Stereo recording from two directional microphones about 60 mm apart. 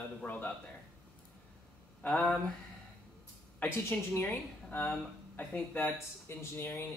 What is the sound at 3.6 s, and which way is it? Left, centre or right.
Speech, left.